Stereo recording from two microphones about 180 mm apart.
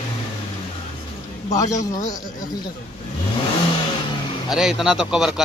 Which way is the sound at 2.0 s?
20° left (ahead or behind).